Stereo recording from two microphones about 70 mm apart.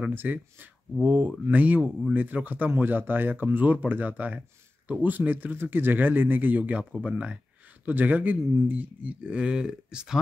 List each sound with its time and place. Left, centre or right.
0.1 s speech: right; by 10.1 s centre